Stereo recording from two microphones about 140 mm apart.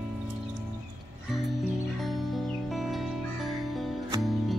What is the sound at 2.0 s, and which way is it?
Music, centre (ahead or behind).